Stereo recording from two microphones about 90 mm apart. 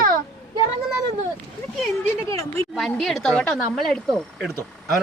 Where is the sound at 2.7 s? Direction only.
5° left (ahead or behind).